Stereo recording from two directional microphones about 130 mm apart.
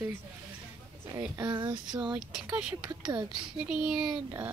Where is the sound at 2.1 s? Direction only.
5° right (ahead or behind).